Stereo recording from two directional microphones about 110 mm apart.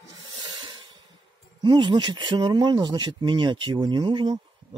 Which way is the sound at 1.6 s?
45° right (ahead or behind).